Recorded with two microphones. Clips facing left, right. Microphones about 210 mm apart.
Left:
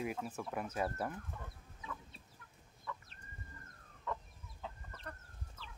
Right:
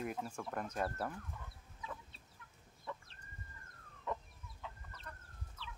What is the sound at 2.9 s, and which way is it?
Chicken, 25° right (ahead or behind).